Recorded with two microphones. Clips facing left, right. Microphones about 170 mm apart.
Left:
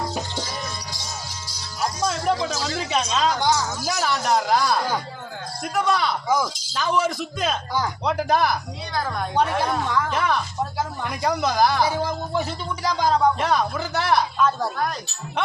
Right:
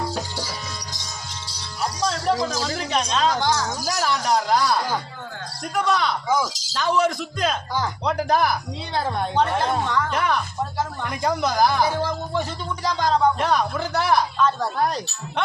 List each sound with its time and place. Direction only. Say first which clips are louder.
2.0 s music: even; 5° left (ahead or behind)
2.5 s speech: even; 5° left (ahead or behind)
9.0 s a woman's voice: right 2 dB; 30° right (ahead or behind)
9.3 s speech: even; 10° left (ahead or behind)